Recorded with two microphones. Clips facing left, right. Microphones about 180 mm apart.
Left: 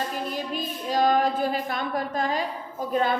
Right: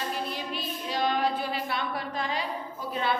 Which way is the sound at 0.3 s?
45° left (ahead or behind).